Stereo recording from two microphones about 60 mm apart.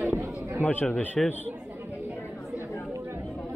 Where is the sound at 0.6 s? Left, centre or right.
Left.